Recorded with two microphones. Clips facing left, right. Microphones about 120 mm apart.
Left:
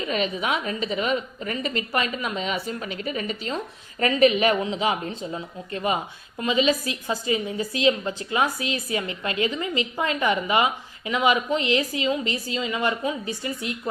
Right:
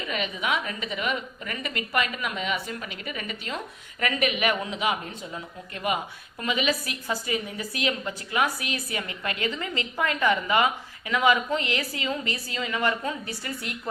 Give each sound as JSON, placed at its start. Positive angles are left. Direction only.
{"t": 0.1, "sound": "a woman's voice", "side_deg": 35}